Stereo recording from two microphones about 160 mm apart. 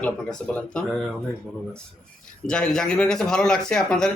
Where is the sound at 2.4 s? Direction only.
5° left (ahead or behind).